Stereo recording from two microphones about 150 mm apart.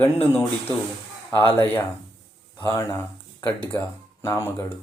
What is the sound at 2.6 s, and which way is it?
Speech, 20° left (ahead or behind).